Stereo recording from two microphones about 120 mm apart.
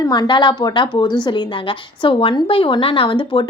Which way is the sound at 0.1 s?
40° left (ahead or behind).